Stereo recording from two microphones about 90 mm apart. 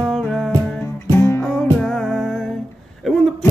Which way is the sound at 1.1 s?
30° left (ahead or behind).